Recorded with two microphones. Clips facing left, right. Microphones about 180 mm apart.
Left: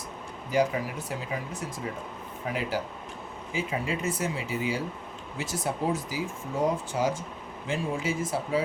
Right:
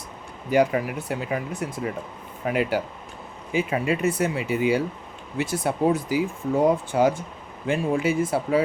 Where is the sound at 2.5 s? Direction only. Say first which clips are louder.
Right 7 dB; 65° right (ahead or behind).